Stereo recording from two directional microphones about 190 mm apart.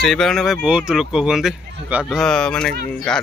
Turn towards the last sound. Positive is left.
turn(degrees=5)  # may be behind; listen again after turning